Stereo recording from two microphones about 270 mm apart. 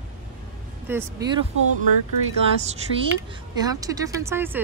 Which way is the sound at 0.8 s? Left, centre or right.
Centre.